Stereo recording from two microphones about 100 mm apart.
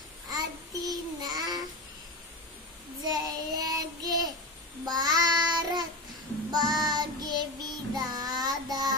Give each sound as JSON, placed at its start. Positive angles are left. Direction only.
{"t": 0.3, "sound": "child singing", "side_deg": -40}
{"t": 3.0, "sound": "child singing", "side_deg": -40}